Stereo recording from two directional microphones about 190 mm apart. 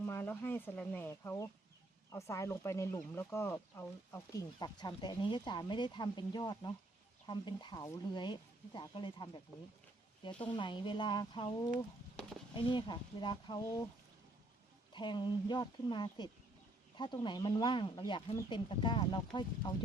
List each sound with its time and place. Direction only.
0.0 s speech: 10° left (ahead or behind)
10.5 s speech: 25° left (ahead or behind)
12.5 s speech: 25° left (ahead or behind)
14.9 s speech: 25° left (ahead or behind)